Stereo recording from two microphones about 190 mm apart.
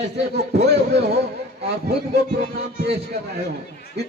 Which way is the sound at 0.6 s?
60° right (ahead or behind).